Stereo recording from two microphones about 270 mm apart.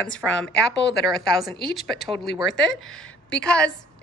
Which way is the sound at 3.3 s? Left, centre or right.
Centre.